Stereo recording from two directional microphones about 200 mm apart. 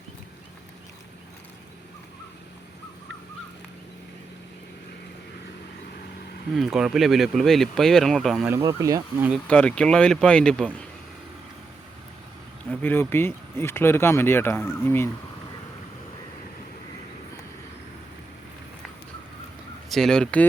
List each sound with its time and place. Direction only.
6.5 s speech: centre (ahead or behind)
8.4 s speech: 15° right (ahead or behind)
9.3 s speech: 5° left (ahead or behind)
12.7 s speech: 10° left (ahead or behind)
19.9 s speech: centre (ahead or behind)